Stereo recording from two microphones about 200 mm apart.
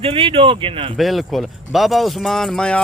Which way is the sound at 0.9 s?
Centre (ahead or behind).